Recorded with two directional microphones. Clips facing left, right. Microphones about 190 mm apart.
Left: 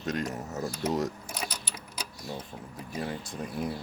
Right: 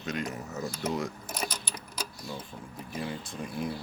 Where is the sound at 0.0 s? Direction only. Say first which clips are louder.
Left 2 dB; 40° left (ahead or behind).